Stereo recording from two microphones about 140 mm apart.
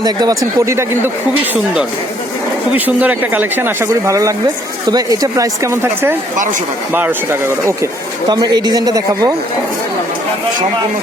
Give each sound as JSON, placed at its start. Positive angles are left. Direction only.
{"t": 0.0, "sound": "speech", "side_deg": -25}
{"t": 2.7, "sound": "speech", "side_deg": -10}
{"t": 8.3, "sound": "speech", "side_deg": -30}